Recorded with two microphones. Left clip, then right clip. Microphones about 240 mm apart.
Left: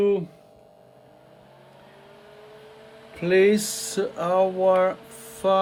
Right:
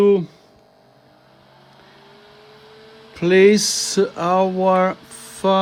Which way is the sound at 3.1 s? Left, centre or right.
Right.